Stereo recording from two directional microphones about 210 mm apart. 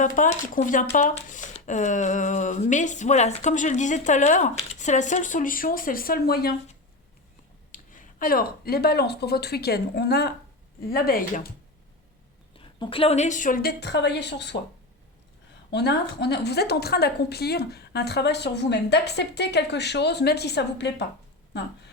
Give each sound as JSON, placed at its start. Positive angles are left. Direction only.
{"t": 0.0, "sound": "speech", "side_deg": 35}
{"t": 7.7, "sound": "a woman's voice", "side_deg": 40}
{"t": 12.5, "sound": "a woman's voice", "side_deg": 25}
{"t": 15.7, "sound": "a woman's voice", "side_deg": 50}